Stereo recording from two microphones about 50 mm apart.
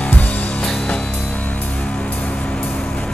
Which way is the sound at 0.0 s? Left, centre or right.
Left.